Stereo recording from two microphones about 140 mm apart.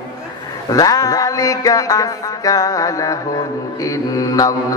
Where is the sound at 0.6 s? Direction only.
25° left (ahead or behind).